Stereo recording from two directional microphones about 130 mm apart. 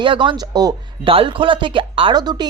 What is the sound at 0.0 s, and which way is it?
Speech, 40° right (ahead or behind).